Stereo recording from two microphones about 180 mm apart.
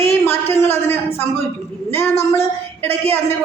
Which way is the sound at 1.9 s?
15° left (ahead or behind).